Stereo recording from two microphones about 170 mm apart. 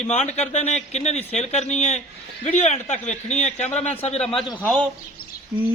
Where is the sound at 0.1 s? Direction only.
40° left (ahead or behind).